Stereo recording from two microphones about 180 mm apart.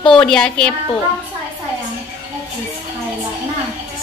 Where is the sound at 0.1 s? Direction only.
5° left (ahead or behind).